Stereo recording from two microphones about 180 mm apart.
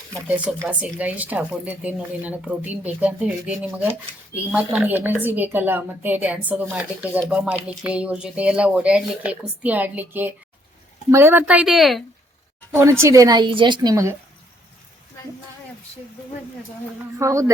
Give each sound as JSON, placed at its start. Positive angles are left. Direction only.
{"t": 0.3, "sound": "speech", "side_deg": -10}
{"t": 12.7, "sound": "speech", "side_deg": -15}
{"t": 17.2, "sound": "speech", "side_deg": -15}